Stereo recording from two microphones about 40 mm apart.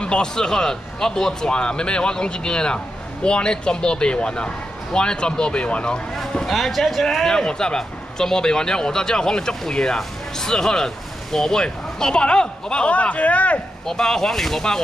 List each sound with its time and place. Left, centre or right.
0.0 s speech: left
6.4 s a man's voice: centre
11.6 s speech: centre
12.9 s speech: left
13.8 s a man's voice: centre